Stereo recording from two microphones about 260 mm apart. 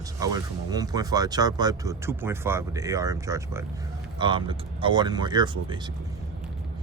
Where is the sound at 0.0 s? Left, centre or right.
Centre.